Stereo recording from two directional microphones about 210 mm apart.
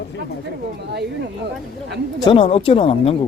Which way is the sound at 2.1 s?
20° left (ahead or behind).